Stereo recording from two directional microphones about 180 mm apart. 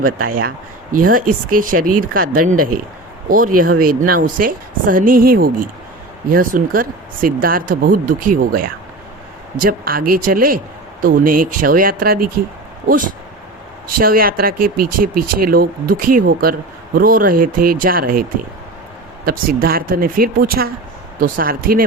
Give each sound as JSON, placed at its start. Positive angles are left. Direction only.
{"t": 0.3, "sound": "speech", "side_deg": -50}
{"t": 13.8, "sound": "speech", "side_deg": -55}